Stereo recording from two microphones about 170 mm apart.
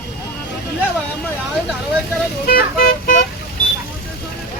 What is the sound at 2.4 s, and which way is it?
Speech, 60° left (ahead or behind).